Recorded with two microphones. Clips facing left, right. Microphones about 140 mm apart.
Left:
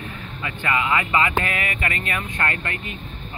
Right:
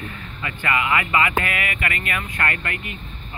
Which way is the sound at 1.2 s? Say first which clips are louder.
Even; 25° left (ahead or behind).